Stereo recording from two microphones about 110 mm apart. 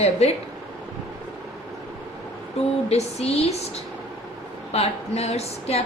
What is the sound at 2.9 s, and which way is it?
Speech, 70° left (ahead or behind).